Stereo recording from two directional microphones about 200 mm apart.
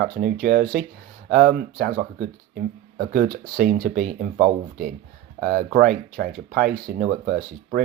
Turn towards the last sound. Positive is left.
turn(degrees=-50)  # may be behind; listen again after turning